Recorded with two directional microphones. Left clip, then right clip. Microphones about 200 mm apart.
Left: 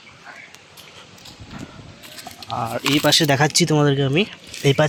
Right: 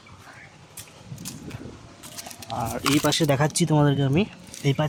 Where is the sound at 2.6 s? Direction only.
15° left (ahead or behind).